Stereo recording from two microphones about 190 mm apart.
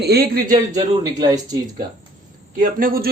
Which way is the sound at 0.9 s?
20° right (ahead or behind).